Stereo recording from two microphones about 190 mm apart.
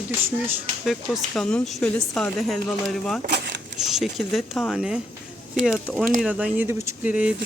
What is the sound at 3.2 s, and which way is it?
Speech, 60° right (ahead or behind).